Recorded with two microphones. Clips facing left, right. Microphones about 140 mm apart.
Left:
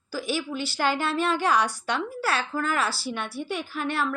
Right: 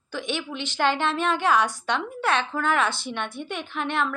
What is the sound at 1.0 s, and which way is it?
A woman's voice, 40° left (ahead or behind).